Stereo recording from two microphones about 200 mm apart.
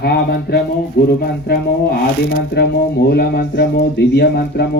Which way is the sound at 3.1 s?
55° left (ahead or behind).